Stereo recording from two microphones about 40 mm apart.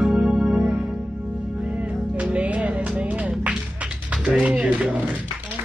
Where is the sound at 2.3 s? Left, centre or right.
Right.